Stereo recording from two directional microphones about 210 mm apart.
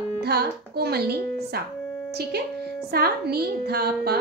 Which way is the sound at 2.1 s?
50° right (ahead or behind).